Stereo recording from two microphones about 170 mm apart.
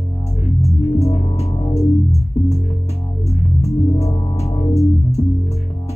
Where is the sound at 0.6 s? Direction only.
40° left (ahead or behind).